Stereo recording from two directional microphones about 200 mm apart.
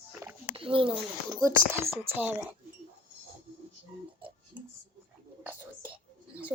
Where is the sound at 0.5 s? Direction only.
25° right (ahead or behind); by 2.3 s 10° right (ahead or behind).